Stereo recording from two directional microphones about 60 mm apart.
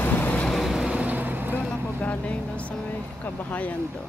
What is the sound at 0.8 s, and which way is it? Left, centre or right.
Vehicle, right.